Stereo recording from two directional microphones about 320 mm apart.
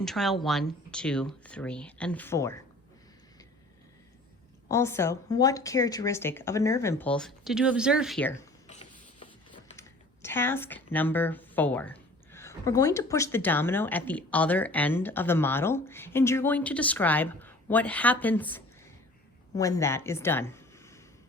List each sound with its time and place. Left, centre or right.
0.0 s a woman's voice: centre
4.7 s speech: centre
8.6 s a sound: left
10.2 s a woman's voice: centre